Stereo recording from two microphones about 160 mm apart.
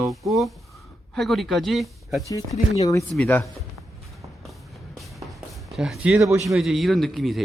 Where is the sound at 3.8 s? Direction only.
Centre (ahead or behind).